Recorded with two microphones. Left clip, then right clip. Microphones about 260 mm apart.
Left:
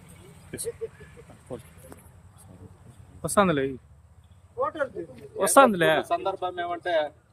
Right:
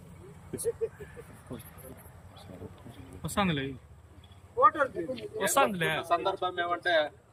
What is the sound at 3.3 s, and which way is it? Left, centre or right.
Speech, centre.